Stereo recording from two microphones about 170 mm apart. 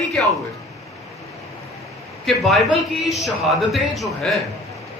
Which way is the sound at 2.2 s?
Centre (ahead or behind).